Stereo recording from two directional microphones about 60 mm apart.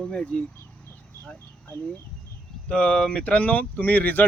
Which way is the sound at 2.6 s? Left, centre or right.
Centre.